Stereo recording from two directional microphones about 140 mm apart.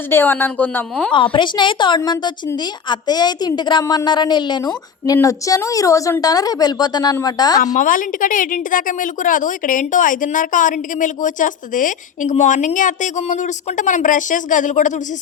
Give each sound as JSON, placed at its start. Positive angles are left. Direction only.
{"t": 0.1, "sound": "a woman's voice", "side_deg": 15}
{"t": 1.1, "sound": "a woman's voice", "side_deg": 35}
{"t": 7.6, "sound": "a woman's voice", "side_deg": 70}